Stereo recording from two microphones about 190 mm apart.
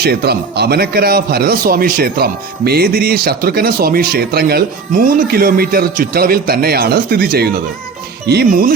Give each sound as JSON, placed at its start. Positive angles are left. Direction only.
{"t": 0.0, "sound": "a man's voice", "side_deg": -55}